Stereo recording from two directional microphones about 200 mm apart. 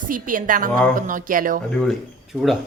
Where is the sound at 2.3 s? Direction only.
Centre (ahead or behind).